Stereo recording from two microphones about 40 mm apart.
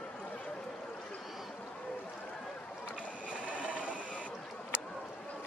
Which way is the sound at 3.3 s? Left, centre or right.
Right.